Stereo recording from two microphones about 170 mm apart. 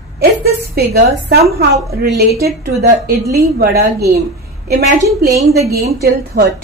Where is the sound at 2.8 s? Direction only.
50° right (ahead or behind).